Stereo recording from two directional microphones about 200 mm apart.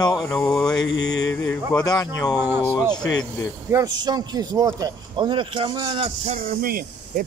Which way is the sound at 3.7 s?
20° right (ahead or behind).